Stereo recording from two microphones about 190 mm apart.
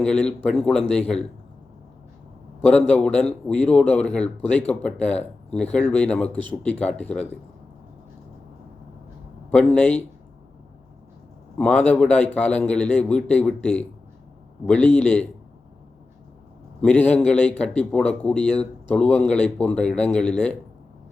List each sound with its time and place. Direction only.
0.0 s speech: 5° left (ahead or behind)
2.6 s a man's voice: 5° left (ahead or behind)
9.5 s a man's voice: 5° left (ahead or behind)
11.5 s a man's voice: 5° left (ahead or behind)
16.8 s a man's voice: 5° left (ahead or behind)